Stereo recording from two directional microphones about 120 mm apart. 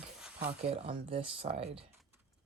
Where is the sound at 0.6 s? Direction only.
60° right (ahead or behind).